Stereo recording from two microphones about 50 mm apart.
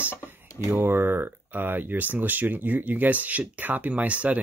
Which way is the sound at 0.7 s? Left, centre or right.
Right.